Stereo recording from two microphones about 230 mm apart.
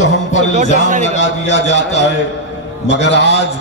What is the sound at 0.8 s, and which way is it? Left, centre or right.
Speech, right.